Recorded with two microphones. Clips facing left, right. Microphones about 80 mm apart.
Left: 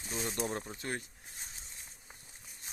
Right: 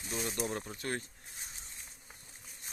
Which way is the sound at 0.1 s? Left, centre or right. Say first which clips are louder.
Even; left.